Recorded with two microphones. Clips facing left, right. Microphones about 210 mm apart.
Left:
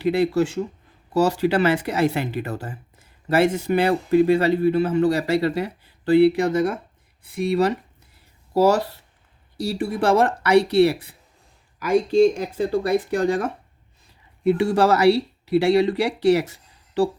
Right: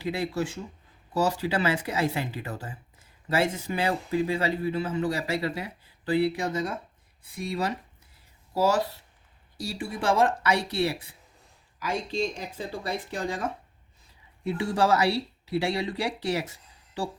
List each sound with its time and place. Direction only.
0.0 s speech: 70° left (ahead or behind)